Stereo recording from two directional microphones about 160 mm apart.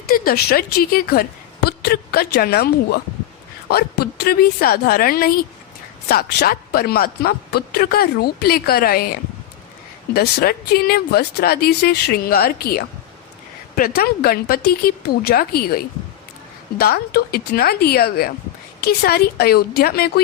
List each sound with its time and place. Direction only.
0.1 s speech: 75° left (ahead or behind)
10.2 s speech: 75° left (ahead or behind)